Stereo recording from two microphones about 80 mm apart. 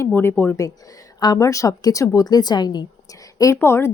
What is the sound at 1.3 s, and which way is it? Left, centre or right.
Speech, left.